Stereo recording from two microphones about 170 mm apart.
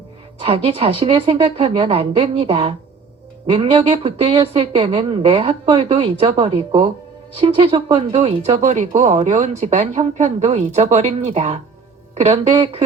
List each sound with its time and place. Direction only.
0.3 s speech: 35° right (ahead or behind)